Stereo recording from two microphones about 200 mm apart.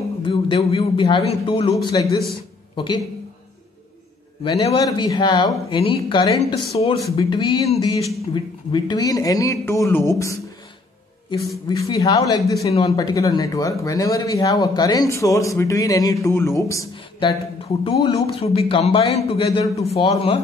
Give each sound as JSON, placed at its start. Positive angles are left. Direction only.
{"t": 0.2, "sound": "a man's voice", "side_deg": 25}
{"t": 4.4, "sound": "a man's voice", "side_deg": 20}
{"t": 11.7, "sound": "speech", "side_deg": 15}
{"t": 17.8, "sound": "a man's voice", "side_deg": 25}